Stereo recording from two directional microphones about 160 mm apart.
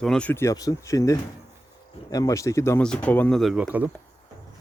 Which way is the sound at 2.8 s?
5° left (ahead or behind).